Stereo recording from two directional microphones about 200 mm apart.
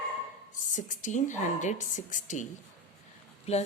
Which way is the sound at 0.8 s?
40° left (ahead or behind).